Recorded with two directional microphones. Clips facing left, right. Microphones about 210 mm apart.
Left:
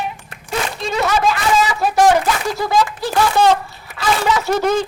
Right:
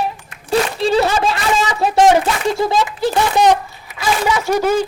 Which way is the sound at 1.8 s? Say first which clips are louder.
Right 3 dB; 25° right (ahead or behind).